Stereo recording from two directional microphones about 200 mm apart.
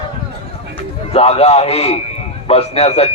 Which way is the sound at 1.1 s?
30° left (ahead or behind).